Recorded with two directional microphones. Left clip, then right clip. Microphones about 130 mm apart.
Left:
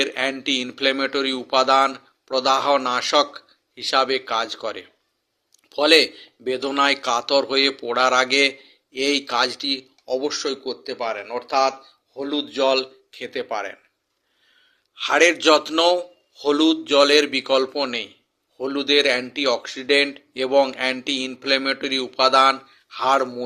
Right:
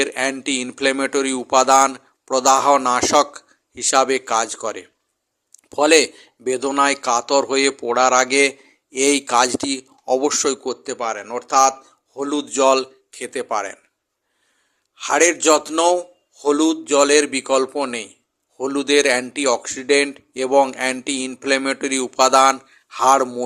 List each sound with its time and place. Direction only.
0.0 s a man's voice: 35° right (ahead or behind)
14.9 s a man's voice: 30° right (ahead or behind)